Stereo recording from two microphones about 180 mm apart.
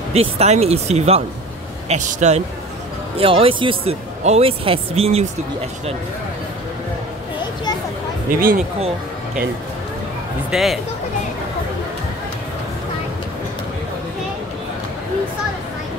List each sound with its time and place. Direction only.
0.1 s speech: 35° right (ahead or behind)
8.3 s speech: 50° right (ahead or behind)
10.5 s speech: centre (ahead or behind)